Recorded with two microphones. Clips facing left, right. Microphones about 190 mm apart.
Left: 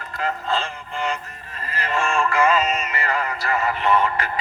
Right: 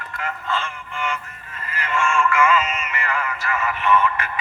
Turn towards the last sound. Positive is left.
turn(degrees=35)  # may be behind; listen again after turning